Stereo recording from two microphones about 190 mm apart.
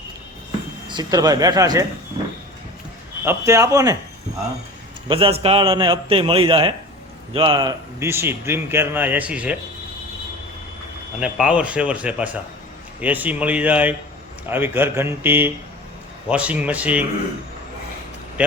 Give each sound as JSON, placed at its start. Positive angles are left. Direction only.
{"t": 0.9, "sound": "a man's voice", "side_deg": -20}
{"t": 3.2, "sound": "a man's voice", "side_deg": -15}
{"t": 5.0, "sound": "a man's voice", "side_deg": -30}
{"t": 11.2, "sound": "a man's voice", "side_deg": -5}
{"t": 18.4, "sound": "a man's voice", "side_deg": -5}